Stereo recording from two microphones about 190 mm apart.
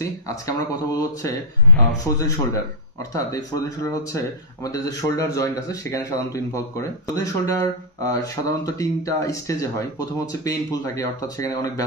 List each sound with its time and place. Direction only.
0.0 s speech: 15° left (ahead or behind)